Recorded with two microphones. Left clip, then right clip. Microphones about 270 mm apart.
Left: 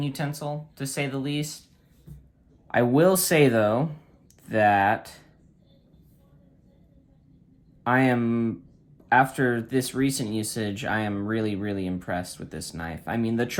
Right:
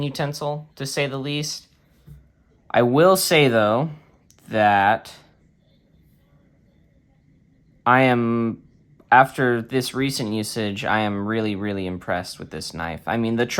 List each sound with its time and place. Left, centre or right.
0.0 s speech: centre
2.6 s speech: centre
7.9 s speech: centre